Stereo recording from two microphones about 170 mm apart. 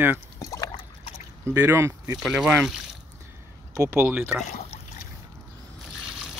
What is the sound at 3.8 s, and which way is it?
Speech, 10° right (ahead or behind).